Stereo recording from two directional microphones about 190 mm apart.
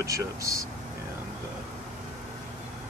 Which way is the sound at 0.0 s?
15° right (ahead or behind).